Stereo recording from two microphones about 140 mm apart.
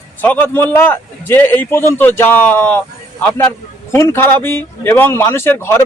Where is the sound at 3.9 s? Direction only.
15° left (ahead or behind).